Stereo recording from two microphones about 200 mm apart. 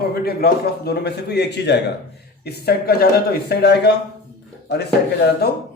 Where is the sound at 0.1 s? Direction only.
50° left (ahead or behind).